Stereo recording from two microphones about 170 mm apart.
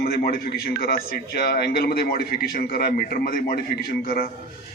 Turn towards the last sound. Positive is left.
turn(degrees=60)  # may be behind; listen again after turning